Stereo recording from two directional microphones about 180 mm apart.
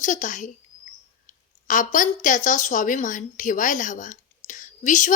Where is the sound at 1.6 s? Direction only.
45° left (ahead or behind).